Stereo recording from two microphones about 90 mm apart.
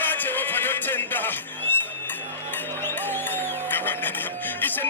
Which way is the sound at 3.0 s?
20° left (ahead or behind).